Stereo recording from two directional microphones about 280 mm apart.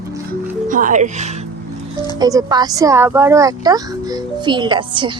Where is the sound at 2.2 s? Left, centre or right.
Centre.